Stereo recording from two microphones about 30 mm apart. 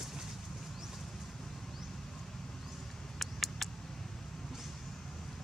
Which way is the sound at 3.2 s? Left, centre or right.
Centre.